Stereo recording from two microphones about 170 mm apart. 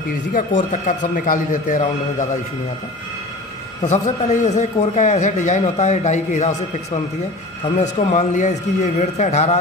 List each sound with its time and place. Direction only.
0.3 s a man's voice: 50° left (ahead or behind)
3.8 s a man's voice: 45° left (ahead or behind)